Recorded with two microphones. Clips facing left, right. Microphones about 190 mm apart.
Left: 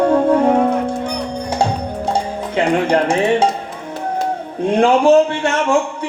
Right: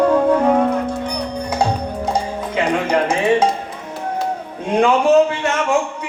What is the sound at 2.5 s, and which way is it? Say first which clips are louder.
Speech: left 3 dB; 30° left (ahead or behind).